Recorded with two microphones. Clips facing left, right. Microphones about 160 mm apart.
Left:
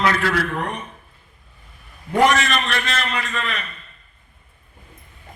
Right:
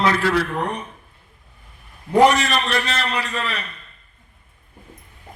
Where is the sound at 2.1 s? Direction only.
35° right (ahead or behind).